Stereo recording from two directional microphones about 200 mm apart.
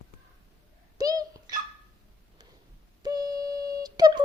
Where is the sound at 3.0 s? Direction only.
20° right (ahead or behind).